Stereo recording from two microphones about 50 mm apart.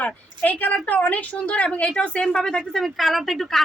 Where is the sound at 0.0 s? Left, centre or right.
Left.